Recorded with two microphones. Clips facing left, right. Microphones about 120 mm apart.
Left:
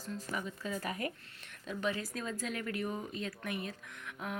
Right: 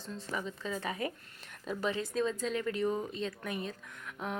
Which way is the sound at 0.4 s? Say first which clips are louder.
Right 2 dB; 25° right (ahead or behind).